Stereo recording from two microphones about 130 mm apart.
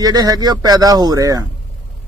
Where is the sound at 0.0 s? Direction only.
30° right (ahead or behind).